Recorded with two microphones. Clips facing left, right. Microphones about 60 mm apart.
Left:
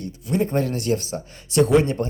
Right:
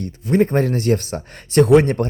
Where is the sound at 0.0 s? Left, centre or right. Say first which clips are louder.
Right 6 dB; right.